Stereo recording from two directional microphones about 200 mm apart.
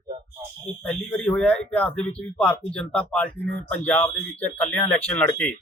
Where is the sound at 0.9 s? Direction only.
5° left (ahead or behind).